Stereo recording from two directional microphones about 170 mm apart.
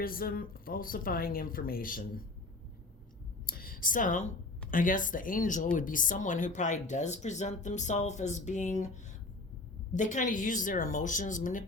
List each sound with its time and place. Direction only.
0.0 s a woman's voice: 60° left (ahead or behind)
3.5 s a sound: 55° left (ahead or behind)
4.7 s speech: 50° left (ahead or behind)
9.9 s speech: 45° left (ahead or behind)